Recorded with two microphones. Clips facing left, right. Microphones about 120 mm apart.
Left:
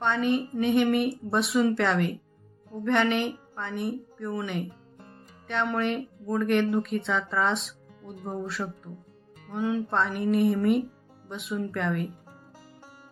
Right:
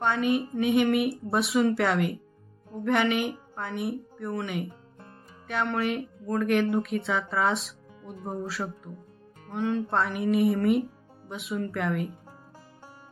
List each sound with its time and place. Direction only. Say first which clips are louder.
0.0 s a woman's voice: even; 10° right (ahead or behind)
5.6 s speech: even; 5° right (ahead or behind)
8.0 s speech: even; 25° right (ahead or behind)
8.4 s speech: even; 5° right (ahead or behind)